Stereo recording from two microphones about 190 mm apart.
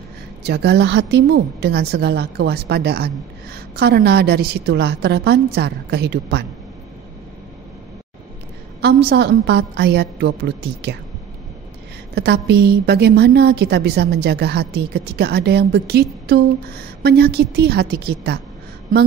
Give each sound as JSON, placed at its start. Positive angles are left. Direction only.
{"t": 0.4, "sound": "a woman's voice", "side_deg": -60}
{"t": 8.8, "sound": "a woman's voice", "side_deg": -60}
{"t": 12.2, "sound": "a woman's voice", "side_deg": -60}